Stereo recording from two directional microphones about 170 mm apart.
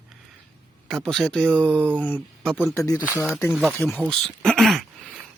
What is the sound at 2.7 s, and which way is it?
Speech, 20° left (ahead or behind).